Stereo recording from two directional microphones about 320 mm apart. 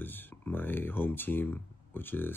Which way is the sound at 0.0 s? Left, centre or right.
Centre.